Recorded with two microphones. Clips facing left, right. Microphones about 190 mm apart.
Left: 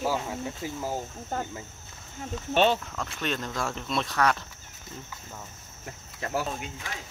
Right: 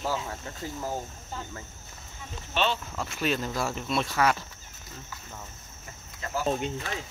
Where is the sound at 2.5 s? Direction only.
50° left (ahead or behind).